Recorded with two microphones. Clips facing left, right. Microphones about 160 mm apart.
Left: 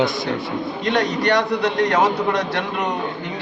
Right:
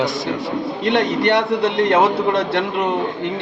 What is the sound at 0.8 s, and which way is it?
A man's voice, 25° right (ahead or behind).